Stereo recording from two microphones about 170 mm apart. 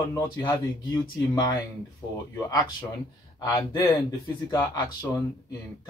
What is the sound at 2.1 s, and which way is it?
Speech, 20° left (ahead or behind).